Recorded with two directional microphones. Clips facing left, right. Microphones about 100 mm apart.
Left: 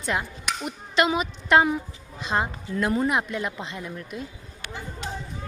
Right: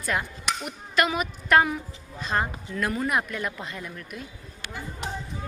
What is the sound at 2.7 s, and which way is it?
Speech, 30° left (ahead or behind).